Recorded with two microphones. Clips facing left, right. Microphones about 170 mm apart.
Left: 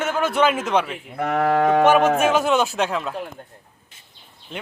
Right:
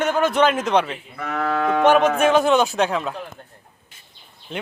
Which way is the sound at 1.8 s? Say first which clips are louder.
Even; 5° left (ahead or behind).